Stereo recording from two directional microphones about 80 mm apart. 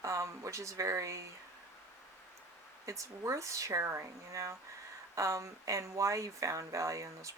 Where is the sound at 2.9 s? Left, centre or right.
Right.